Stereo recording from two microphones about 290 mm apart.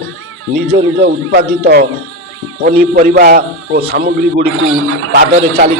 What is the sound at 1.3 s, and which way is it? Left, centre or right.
A man's voice, right.